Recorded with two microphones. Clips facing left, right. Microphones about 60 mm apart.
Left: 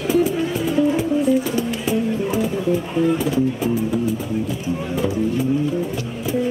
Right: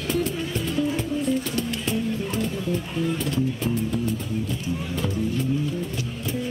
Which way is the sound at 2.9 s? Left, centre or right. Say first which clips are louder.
Left 9 dB; centre.